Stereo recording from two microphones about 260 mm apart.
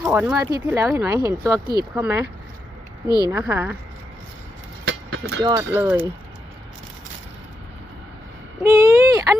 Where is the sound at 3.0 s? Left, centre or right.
Centre.